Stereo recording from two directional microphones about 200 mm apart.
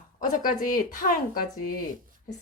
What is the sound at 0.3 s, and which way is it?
Speech, 40° left (ahead or behind).